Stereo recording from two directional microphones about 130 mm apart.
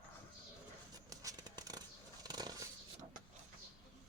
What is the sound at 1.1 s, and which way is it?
Vehicle, 25° right (ahead or behind).